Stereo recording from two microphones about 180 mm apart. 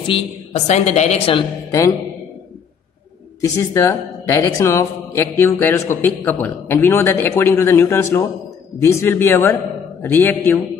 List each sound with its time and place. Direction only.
0.1 s a woman's voice: 40° left (ahead or behind)
3.3 s speech: 15° left (ahead or behind)